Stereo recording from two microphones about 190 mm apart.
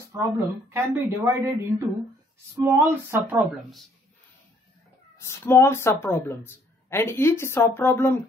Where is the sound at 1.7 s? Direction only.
Centre (ahead or behind).